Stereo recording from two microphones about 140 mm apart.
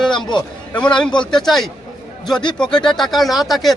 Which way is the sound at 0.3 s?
35° left (ahead or behind).